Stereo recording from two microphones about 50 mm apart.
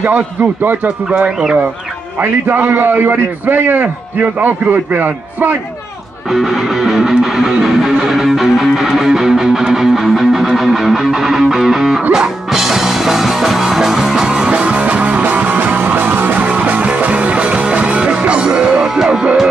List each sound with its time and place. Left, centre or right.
2.4 s a man's voice: right
6.3 s music: centre